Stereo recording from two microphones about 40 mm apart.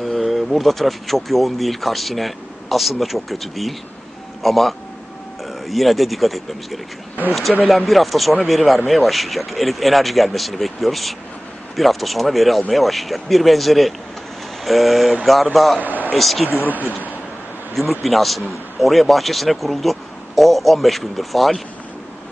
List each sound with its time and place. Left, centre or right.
0.0 s speech: centre
17.7 s speech: centre